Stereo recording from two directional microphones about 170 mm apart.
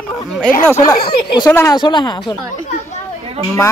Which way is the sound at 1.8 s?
25° left (ahead or behind).